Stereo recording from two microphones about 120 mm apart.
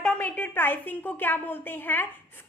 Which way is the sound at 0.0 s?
10° left (ahead or behind).